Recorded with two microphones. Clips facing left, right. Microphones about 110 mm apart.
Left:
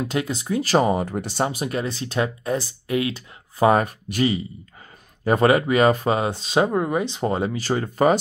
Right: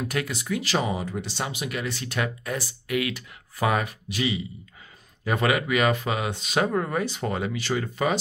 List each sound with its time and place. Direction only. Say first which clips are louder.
0.0 s speech: left 4 dB; 25° left (ahead or behind); by 8.2 s 40° left (ahead or behind)